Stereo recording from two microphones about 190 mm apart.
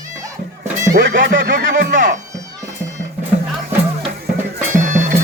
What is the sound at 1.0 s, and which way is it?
Speech, 70° right (ahead or behind).